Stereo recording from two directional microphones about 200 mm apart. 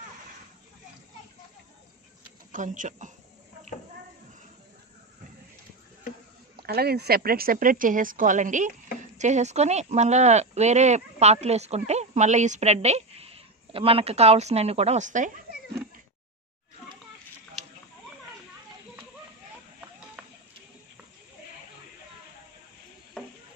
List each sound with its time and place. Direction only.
2.5 s speech: 40° right (ahead or behind)
6.6 s speech: 50° right (ahead or behind)
20.2 s a sound: 5° right (ahead or behind)